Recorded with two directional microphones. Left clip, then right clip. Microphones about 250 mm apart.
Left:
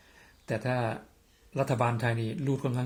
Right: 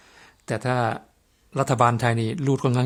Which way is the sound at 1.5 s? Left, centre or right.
Right.